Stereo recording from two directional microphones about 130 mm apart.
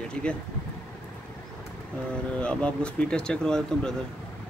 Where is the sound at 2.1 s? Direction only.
10° left (ahead or behind).